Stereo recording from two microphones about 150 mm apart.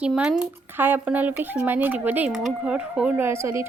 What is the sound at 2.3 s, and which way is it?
Speech, centre (ahead or behind).